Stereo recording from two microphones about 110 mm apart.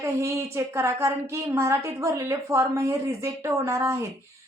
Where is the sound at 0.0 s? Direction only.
25° right (ahead or behind).